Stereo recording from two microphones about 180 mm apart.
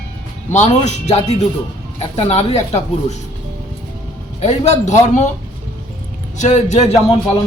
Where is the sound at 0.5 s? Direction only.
40° left (ahead or behind).